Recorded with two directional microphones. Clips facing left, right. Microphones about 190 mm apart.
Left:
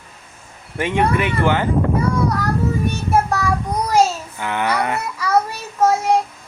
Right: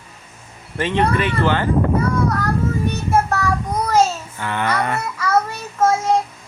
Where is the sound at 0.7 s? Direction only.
10° left (ahead or behind).